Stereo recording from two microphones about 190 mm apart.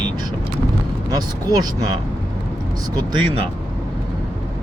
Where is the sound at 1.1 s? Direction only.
20° right (ahead or behind).